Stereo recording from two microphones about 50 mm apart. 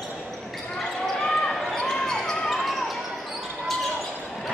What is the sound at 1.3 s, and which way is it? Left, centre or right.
Basketball bounce, centre.